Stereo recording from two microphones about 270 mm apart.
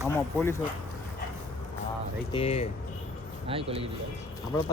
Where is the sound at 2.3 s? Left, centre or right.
Left.